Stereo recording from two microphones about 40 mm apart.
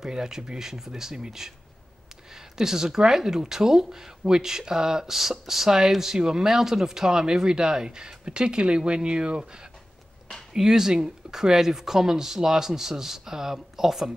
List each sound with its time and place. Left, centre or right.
0.0 s speech: centre